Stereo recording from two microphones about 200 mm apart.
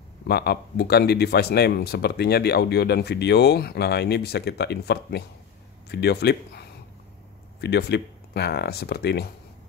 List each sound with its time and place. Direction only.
0.3 s speech: 55° left (ahead or behind)